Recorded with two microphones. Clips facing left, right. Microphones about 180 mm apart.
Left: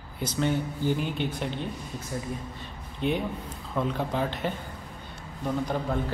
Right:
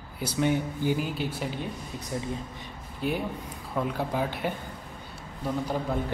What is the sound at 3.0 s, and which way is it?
Speech, 5° right (ahead or behind).